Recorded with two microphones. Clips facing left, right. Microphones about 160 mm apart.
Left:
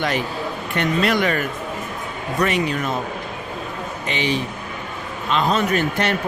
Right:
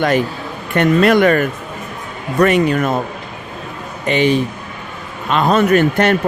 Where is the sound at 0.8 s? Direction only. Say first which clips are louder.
Right 8 dB; 55° right (ahead or behind).